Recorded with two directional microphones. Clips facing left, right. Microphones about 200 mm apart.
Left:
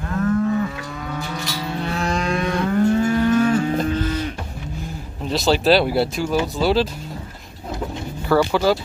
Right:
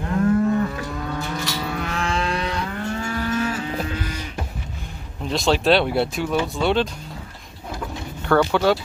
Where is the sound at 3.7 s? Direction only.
10° right (ahead or behind).